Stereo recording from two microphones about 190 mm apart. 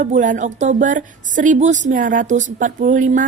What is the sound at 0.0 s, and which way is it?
A woman's voice, 40° right (ahead or behind).